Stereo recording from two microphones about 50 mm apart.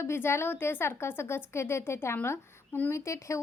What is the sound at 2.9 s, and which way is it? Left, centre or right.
Speech, left.